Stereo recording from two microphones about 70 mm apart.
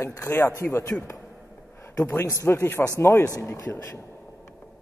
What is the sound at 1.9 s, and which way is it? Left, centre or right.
Speech, left.